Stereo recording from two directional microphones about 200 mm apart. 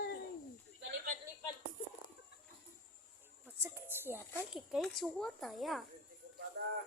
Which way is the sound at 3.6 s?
10° right (ahead or behind).